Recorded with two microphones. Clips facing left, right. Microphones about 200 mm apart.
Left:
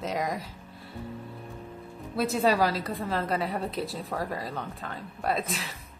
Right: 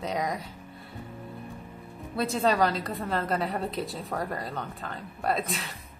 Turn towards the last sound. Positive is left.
turn(degrees=0)  # may be behind; listen again after turning